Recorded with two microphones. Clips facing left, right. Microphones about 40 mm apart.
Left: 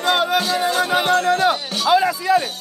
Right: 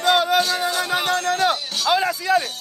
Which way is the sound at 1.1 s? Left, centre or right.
Left.